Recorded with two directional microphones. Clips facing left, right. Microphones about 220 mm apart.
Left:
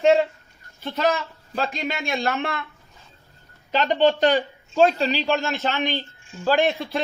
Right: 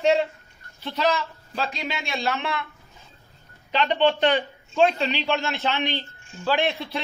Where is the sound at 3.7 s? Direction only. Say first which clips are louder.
Left 2 dB; 45° left (ahead or behind).